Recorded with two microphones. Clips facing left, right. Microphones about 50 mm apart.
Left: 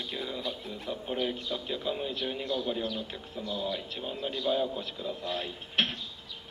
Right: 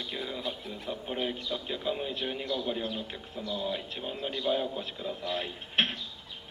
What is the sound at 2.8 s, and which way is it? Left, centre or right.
A woman's voice, right.